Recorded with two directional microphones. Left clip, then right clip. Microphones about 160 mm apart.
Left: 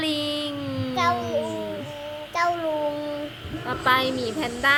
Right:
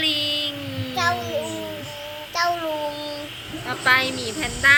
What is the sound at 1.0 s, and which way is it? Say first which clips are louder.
Babbling: even; centre (ahead or behind).